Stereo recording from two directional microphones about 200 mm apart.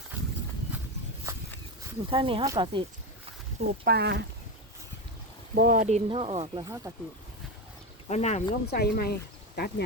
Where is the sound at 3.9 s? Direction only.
55° right (ahead or behind).